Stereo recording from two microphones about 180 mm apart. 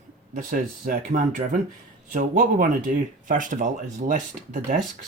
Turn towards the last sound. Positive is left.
turn(degrees=-45)  # may be behind; listen again after turning